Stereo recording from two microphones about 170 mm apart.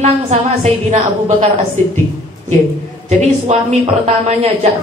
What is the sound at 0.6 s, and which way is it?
Speech, 45° right (ahead or behind).